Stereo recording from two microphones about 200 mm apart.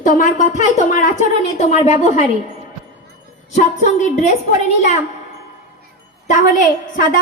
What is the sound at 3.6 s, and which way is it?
Speech, 35° left (ahead or behind).